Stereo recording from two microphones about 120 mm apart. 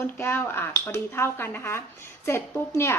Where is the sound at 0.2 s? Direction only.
20° left (ahead or behind).